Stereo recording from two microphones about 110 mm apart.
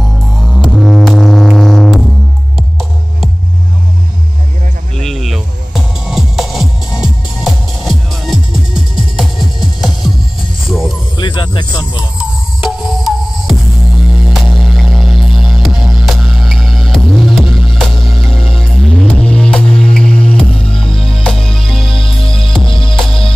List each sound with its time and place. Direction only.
0.5 s music: centre (ahead or behind)
4.9 s music: 5° left (ahead or behind)
11.1 s snake: 45° left (ahead or behind)
12.2 s music: centre (ahead or behind)
21.9 s music: 55° left (ahead or behind)